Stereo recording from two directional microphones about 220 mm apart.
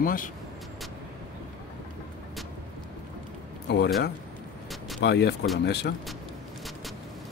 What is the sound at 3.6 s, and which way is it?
Speech, 50° left (ahead or behind).